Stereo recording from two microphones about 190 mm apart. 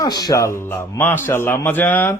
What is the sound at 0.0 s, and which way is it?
A man's voice, 20° left (ahead or behind).